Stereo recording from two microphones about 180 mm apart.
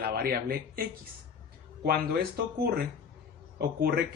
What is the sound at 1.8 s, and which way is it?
Speech, 55° right (ahead or behind).